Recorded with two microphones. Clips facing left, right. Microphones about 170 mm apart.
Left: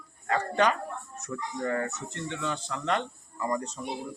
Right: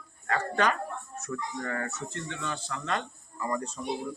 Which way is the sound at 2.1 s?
20° left (ahead or behind).